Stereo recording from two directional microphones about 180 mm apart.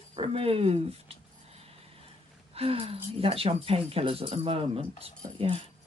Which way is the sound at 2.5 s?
30° right (ahead or behind).